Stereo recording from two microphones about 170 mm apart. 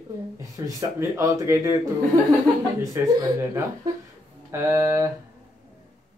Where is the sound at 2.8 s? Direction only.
15° right (ahead or behind).